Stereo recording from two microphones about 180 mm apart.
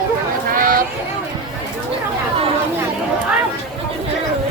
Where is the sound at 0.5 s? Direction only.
50° right (ahead or behind).